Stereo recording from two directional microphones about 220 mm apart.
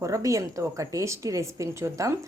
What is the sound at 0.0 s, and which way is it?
A woman's voice, 15° right (ahead or behind).